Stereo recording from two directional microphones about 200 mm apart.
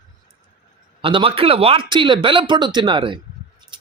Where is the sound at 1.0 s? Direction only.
25° right (ahead or behind).